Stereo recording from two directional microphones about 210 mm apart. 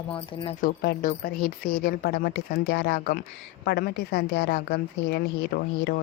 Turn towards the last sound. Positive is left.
turn(degrees=55)  # may be behind; listen again after turning